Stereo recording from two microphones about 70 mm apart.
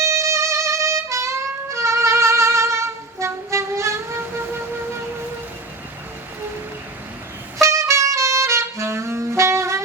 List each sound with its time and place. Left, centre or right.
0.0 s music: right
4.2 s wind instrument: right
7.6 s saxophone: right